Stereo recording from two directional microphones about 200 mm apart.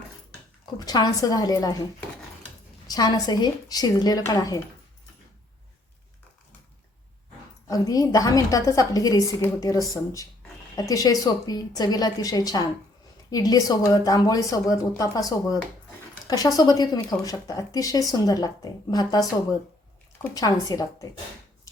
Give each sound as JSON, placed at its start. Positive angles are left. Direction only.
{"t": 0.6, "sound": "speech", "side_deg": 20}
{"t": 2.8, "sound": "speech", "side_deg": 20}
{"t": 7.7, "sound": "a woman's voice", "side_deg": 15}